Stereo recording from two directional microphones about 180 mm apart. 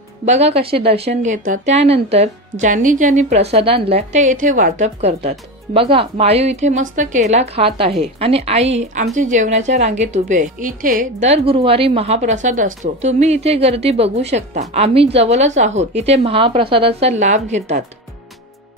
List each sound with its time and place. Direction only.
0.2 s a woman's voice: 40° right (ahead or behind)